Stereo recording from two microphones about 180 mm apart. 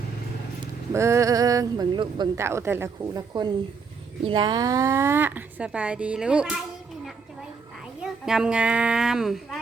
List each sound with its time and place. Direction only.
0.6 s speech: 15° right (ahead or behind)
8.0 s a child's voice: 5° right (ahead or behind)